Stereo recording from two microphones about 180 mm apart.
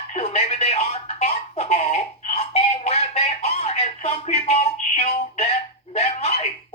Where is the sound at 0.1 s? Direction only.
40° left (ahead or behind).